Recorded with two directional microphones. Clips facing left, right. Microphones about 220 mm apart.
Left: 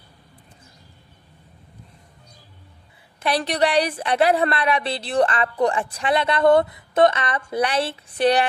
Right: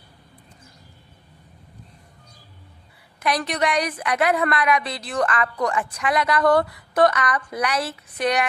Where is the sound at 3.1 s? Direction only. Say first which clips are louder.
Left 2 dB; 30° left (ahead or behind).